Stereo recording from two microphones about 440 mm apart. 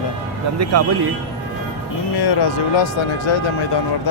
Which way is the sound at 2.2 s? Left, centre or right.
Left.